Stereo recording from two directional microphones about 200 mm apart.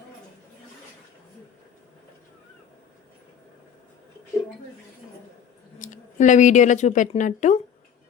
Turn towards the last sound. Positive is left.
turn(degrees=35)  # may be behind; listen again after turning